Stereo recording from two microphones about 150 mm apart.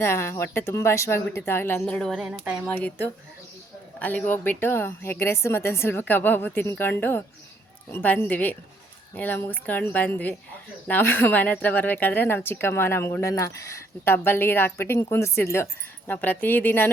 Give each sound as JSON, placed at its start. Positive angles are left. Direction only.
{"t": 0.0, "sound": "speech", "side_deg": 15}
{"t": 1.8, "sound": "speech", "side_deg": 5}
{"t": 2.6, "sound": "speech", "side_deg": 10}